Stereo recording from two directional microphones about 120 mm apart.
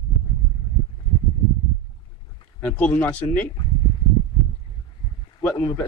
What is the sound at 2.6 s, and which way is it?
Speech, 15° left (ahead or behind).